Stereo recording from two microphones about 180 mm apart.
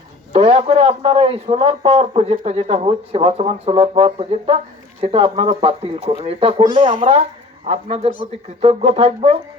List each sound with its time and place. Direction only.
0.3 s speech: 35° right (ahead or behind)